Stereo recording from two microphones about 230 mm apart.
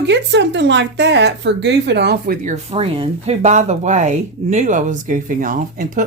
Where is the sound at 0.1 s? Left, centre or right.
Right.